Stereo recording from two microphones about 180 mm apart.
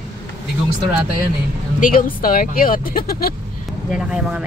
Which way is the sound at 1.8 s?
50° left (ahead or behind).